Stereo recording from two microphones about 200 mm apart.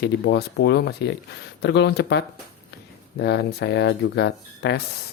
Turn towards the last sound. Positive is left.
turn(degrees=55)  # may be behind; listen again after turning